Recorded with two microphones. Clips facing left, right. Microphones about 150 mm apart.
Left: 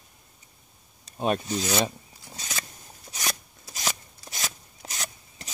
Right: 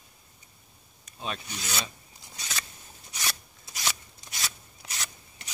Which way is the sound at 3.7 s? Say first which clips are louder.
Left 2 dB; 40° left (ahead or behind).